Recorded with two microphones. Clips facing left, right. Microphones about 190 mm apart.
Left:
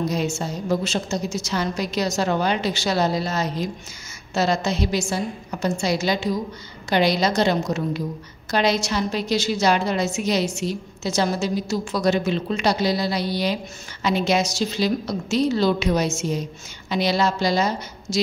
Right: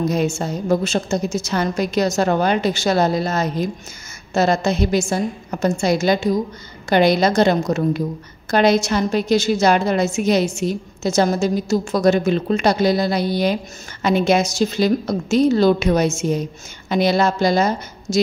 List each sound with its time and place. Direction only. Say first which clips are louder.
0.1 s a woman's voice: right 4 dB; 55° right (ahead or behind)